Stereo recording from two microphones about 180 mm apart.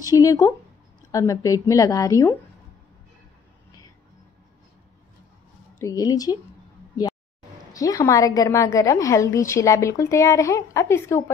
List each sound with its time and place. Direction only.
0.0 s a woman's voice: 20° left (ahead or behind)
5.8 s a woman's voice: 20° left (ahead or behind)
7.7 s a woman's voice: 20° left (ahead or behind)